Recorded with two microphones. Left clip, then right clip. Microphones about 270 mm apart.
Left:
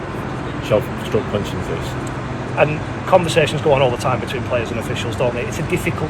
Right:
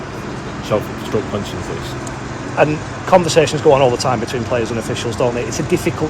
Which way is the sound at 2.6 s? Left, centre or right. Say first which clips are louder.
Right 2 dB; right.